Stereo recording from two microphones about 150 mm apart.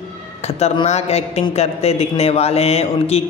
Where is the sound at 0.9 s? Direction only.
45° left (ahead or behind).